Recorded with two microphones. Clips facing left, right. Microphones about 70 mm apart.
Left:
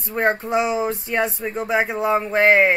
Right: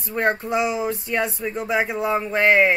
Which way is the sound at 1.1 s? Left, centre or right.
Centre.